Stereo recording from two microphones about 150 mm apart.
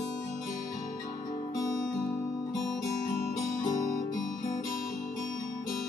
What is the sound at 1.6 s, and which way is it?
Guitar, 20° left (ahead or behind).